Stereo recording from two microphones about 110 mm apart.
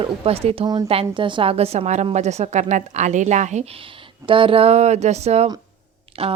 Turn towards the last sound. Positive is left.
turn(degrees=-60)  # may be behind; listen again after turning